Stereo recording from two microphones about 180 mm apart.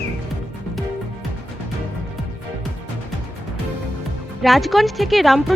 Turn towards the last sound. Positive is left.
turn(degrees=0)  # may be behind; listen again after turning